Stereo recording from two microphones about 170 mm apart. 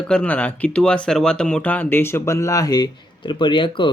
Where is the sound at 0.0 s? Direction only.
5° left (ahead or behind).